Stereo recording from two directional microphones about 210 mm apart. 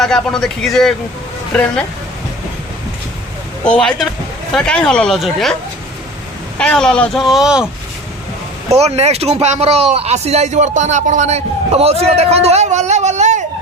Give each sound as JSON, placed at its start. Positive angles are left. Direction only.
{"t": 0.0, "sound": "speech", "side_deg": 5}
{"t": 3.6, "sound": "speech", "side_deg": 5}
{"t": 6.6, "sound": "speech", "side_deg": 5}
{"t": 8.7, "sound": "speech", "side_deg": -30}